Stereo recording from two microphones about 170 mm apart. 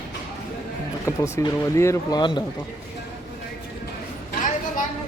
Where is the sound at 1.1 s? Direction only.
15° left (ahead or behind).